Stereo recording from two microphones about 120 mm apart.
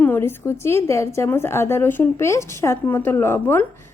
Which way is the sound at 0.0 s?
15° left (ahead or behind).